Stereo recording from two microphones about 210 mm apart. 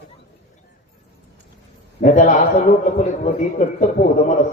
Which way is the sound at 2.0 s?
35° left (ahead or behind).